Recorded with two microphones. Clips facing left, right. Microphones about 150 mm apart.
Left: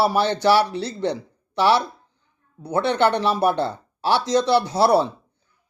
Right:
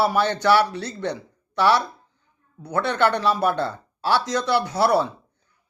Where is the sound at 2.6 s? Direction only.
20° left (ahead or behind).